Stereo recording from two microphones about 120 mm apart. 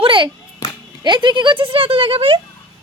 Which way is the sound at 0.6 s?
30° left (ahead or behind).